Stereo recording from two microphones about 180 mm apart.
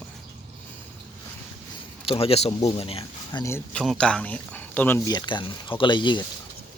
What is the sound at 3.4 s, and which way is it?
Speech, 10° left (ahead or behind).